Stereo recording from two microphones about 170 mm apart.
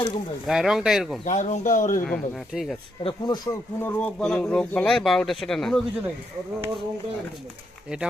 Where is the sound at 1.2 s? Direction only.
45° left (ahead or behind).